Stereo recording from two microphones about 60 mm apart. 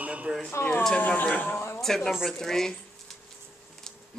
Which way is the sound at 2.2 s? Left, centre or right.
Centre.